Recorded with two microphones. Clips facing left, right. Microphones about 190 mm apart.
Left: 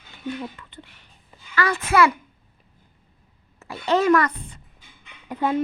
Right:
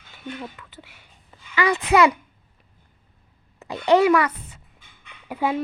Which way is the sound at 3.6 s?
15° right (ahead or behind).